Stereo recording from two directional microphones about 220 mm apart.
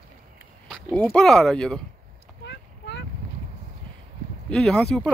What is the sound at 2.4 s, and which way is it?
Boat, 55° left (ahead or behind).